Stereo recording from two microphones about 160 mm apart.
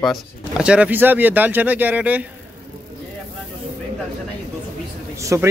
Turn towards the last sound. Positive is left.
turn(degrees=-20)  # may be behind; listen again after turning